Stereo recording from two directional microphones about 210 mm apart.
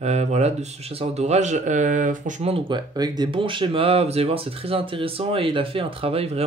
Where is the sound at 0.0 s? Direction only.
30° right (ahead or behind).